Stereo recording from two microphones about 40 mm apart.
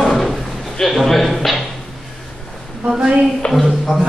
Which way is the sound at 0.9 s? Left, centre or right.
Centre.